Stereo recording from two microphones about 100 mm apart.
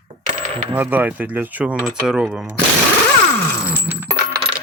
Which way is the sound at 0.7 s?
20° right (ahead or behind).